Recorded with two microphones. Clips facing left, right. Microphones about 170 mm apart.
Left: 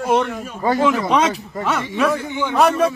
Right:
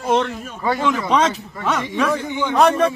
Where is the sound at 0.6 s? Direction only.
45° left (ahead or behind).